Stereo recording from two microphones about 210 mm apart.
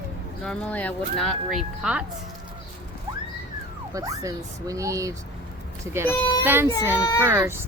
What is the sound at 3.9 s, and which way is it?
Speech, 15° right (ahead or behind).